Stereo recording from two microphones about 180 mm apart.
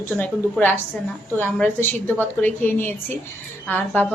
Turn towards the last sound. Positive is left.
turn(degrees=10)  # may be behind; listen again after turning